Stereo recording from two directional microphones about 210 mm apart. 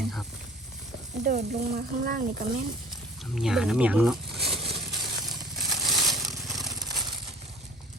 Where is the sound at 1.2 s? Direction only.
30° right (ahead or behind).